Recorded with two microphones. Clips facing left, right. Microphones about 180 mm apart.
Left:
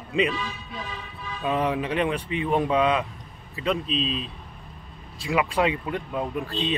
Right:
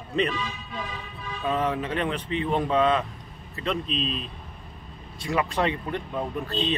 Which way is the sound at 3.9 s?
45° right (ahead or behind).